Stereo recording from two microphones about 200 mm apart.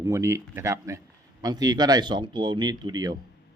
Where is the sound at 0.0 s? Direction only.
15° right (ahead or behind).